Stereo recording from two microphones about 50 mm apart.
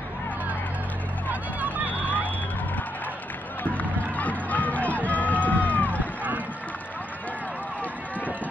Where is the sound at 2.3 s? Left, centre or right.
Left.